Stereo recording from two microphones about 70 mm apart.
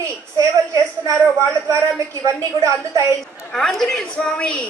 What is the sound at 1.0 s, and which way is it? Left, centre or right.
A woman's voice, right.